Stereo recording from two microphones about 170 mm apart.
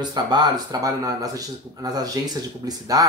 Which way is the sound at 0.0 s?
25° right (ahead or behind).